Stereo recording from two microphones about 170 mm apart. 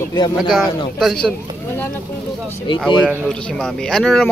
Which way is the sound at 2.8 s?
10° right (ahead or behind).